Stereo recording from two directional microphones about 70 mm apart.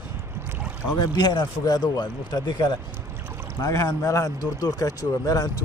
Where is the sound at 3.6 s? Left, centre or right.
Left.